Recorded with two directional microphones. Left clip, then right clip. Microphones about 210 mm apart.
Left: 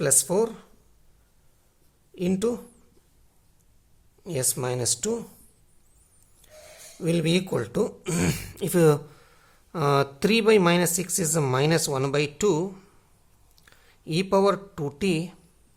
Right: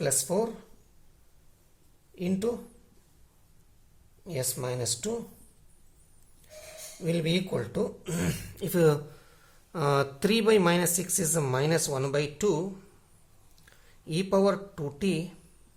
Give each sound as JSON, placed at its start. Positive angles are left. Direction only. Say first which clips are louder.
{"t": 0.0, "sound": "speech", "louder": "left 5 dB", "side_deg": 45}
{"t": 2.1, "sound": "speech", "louder": "left 4 dB", "side_deg": 45}
{"t": 4.2, "sound": "speech", "louder": "left 5 dB", "side_deg": 45}
{"t": 7.0, "sound": "speech", "louder": "left 4 dB", "side_deg": 45}